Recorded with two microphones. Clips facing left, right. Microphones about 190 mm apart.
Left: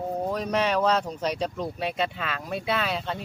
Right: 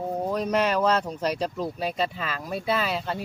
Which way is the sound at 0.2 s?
Centre (ahead or behind).